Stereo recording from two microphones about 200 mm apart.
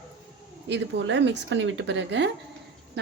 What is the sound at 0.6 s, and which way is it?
Speech, 60° right (ahead or behind).